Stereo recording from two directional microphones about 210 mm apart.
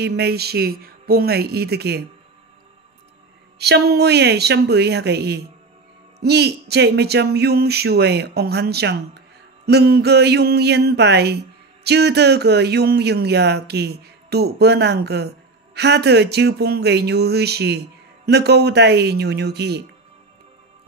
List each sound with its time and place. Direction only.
0.0 s speech: 50° right (ahead or behind)
3.5 s speech: 50° right (ahead or behind)